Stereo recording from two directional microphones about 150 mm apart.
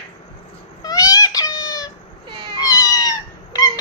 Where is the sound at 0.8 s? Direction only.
25° left (ahead or behind).